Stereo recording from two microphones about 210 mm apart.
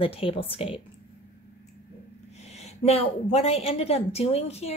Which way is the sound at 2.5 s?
30° left (ahead or behind).